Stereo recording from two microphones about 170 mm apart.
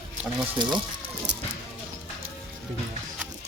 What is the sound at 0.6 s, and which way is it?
Speech, 25° right (ahead or behind).